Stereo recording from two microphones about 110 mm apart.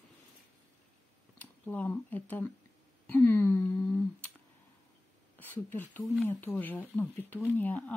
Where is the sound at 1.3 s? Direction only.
15° left (ahead or behind).